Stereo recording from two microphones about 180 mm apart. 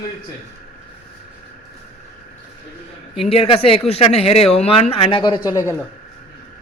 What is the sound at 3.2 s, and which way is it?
A woman's voice, 30° left (ahead or behind).